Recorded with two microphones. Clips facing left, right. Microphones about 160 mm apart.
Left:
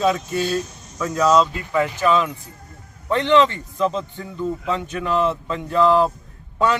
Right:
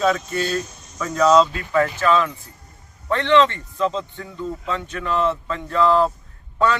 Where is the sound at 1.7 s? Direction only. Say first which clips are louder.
Even; 15° left (ahead or behind).